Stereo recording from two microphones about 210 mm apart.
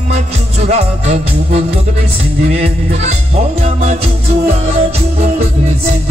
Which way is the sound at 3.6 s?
30° right (ahead or behind).